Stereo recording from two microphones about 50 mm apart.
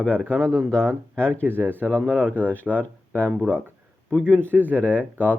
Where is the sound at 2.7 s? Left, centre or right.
Left.